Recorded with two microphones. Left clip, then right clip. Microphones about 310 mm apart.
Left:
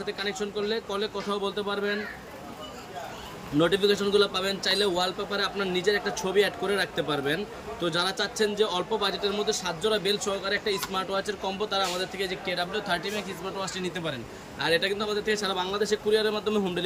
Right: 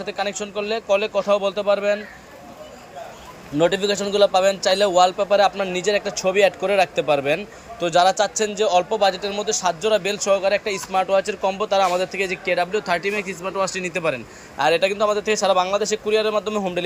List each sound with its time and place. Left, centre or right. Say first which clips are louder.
0.0 s a man's voice: right 6 dB; centre
3.6 s a man's voice: right 4 dB; centre